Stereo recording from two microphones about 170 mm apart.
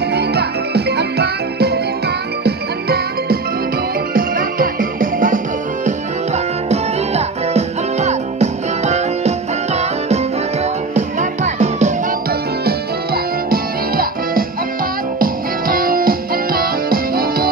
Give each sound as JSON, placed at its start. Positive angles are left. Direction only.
{"t": 0.1, "sound": "music", "side_deg": -75}
{"t": 5.9, "sound": "music", "side_deg": -40}
{"t": 12.6, "sound": "music", "side_deg": -60}